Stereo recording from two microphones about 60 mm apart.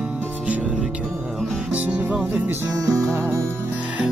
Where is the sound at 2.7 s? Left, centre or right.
Right.